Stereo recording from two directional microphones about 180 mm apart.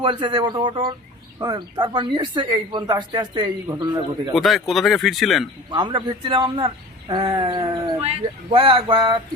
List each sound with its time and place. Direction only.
0.0 s speech: 25° right (ahead or behind)
4.4 s speech: centre (ahead or behind)
5.7 s speech: 25° right (ahead or behind)